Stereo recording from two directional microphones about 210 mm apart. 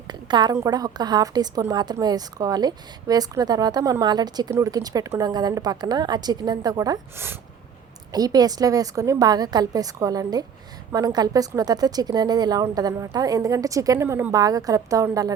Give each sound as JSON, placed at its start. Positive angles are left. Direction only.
{"t": 0.1, "sound": "a woman's voice", "side_deg": -20}